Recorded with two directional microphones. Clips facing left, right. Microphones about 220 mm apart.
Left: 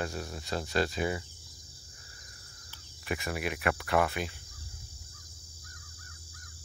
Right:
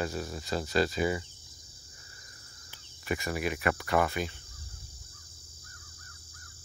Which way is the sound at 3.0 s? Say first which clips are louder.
Right 2 dB; centre (ahead or behind).